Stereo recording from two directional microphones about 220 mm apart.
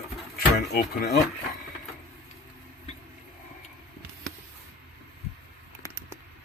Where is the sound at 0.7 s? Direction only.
45° left (ahead or behind).